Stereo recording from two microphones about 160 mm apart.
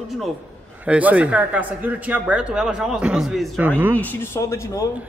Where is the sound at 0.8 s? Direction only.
10° right (ahead or behind).